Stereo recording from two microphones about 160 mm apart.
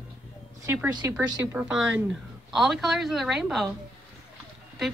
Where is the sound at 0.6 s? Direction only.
10° right (ahead or behind).